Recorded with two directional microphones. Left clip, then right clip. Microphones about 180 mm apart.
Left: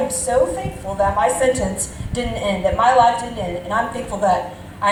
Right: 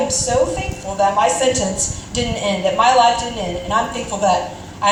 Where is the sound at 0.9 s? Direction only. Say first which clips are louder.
Right 2 dB; 10° right (ahead or behind).